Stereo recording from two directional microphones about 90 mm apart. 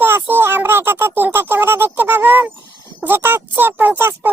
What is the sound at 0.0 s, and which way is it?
Speech, 20° right (ahead or behind).